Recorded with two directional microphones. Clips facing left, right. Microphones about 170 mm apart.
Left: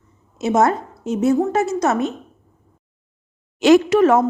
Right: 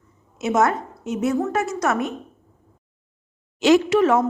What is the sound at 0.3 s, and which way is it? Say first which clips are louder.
A woman's voice: left 3 dB; 30° left (ahead or behind).